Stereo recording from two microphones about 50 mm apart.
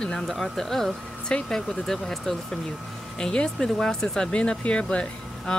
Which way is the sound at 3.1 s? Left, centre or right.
Centre.